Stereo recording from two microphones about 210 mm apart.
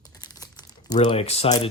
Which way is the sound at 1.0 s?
30° left (ahead or behind).